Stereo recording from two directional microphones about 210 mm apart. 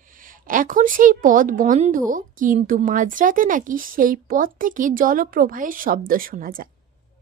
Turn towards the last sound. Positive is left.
turn(degrees=-40)  # may be behind; listen again after turning